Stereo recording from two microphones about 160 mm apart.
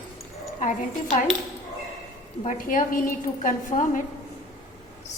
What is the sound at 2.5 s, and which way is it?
A woman's voice, 60° left (ahead or behind).